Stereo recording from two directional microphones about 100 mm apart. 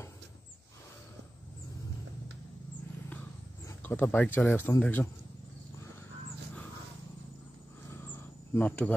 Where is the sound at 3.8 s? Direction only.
20° left (ahead or behind).